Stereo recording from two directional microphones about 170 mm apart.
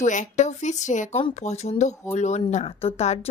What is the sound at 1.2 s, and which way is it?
A woman's voice, 35° left (ahead or behind).